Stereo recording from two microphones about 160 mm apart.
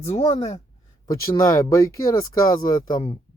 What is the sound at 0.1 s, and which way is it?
Speech, 45° left (ahead or behind).